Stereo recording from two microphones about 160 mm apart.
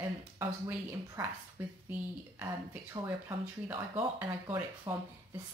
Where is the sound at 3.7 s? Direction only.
15° right (ahead or behind).